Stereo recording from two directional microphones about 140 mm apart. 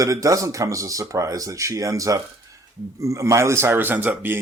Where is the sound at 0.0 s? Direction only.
25° right (ahead or behind).